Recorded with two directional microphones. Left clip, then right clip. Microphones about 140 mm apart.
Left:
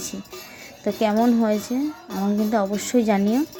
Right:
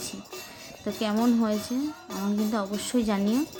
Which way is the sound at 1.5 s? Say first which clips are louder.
Left 6 dB; 20° left (ahead or behind).